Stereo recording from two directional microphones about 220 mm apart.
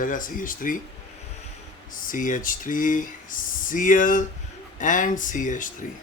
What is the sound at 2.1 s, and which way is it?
Speech, 35° left (ahead or behind).